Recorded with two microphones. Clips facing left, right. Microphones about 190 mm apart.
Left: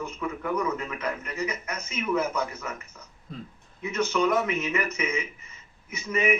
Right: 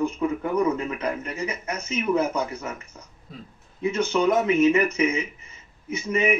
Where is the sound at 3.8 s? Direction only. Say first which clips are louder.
Right 3 dB; 30° right (ahead or behind).